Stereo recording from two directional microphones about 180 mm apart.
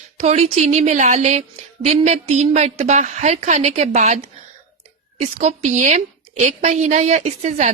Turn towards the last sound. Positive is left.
turn(degrees=-40)  # may be behind; listen again after turning